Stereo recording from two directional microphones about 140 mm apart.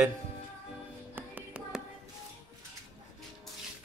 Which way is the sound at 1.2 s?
15° right (ahead or behind).